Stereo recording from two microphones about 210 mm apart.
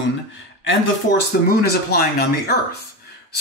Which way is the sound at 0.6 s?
60° left (ahead or behind).